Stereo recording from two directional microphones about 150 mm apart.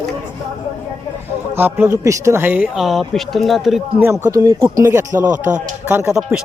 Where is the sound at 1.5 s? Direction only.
15° right (ahead or behind).